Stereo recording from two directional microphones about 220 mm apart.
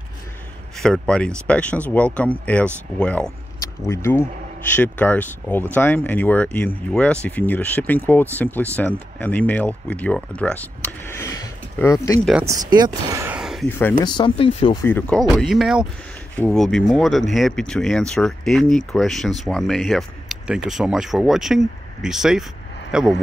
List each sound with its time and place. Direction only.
0.8 s speech: 5° left (ahead or behind)
12.3 s speech: 5° right (ahead or behind)
12.5 s speech: 20° right (ahead or behind); by 13.7 s centre (ahead or behind)
13.7 s speech: 10° left (ahead or behind)
14.1 s speech: 25° left (ahead or behind)
14.8 s speech: 10° left (ahead or behind)